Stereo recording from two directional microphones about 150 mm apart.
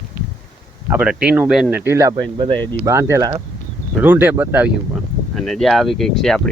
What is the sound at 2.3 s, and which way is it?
Speech, 35° right (ahead or behind).